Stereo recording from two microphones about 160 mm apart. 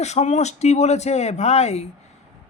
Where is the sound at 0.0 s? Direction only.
45° left (ahead or behind).